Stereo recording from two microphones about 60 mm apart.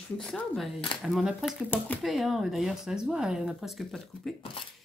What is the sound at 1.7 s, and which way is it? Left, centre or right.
Speech, left.